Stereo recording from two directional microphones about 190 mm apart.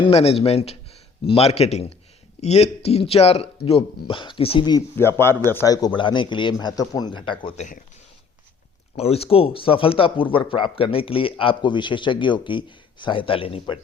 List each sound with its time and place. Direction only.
0.0 s speech: 30° left (ahead or behind)
4.9 s speech: 10° left (ahead or behind); by 7.9 s 40° left (ahead or behind)
9.0 s speech: 30° left (ahead or behind)